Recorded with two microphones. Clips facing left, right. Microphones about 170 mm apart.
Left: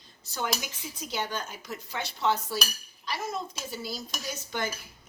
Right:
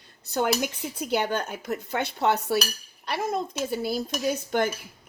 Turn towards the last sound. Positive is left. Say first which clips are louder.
# right 9 dB
turn(degrees=-55)  # may be behind; listen again after turning